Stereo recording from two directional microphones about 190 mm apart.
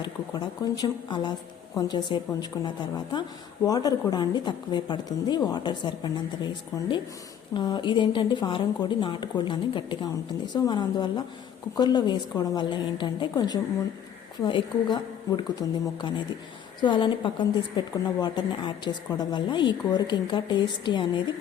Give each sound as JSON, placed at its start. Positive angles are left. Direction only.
{"t": 0.0, "sound": "a woman's voice", "side_deg": 20}
{"t": 7.5, "sound": "a woman's voice", "side_deg": 25}